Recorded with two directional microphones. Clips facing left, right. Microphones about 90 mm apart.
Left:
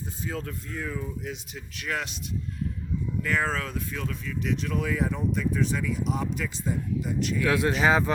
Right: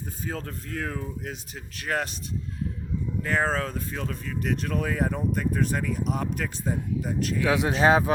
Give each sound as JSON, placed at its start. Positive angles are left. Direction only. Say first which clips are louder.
{"t": 0.3, "sound": "speech", "louder": "even", "side_deg": -40}
{"t": 0.7, "sound": "speech", "louder": "right 2 dB", "side_deg": -60}
{"t": 3.2, "sound": "speech", "louder": "right 3 dB", "side_deg": -35}
{"t": 7.4, "sound": "speech", "louder": "even", "side_deg": -20}